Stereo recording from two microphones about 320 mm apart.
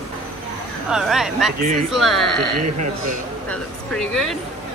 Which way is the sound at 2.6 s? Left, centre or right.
Right.